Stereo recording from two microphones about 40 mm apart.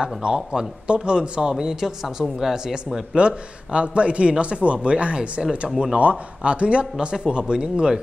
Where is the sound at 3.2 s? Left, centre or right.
Right.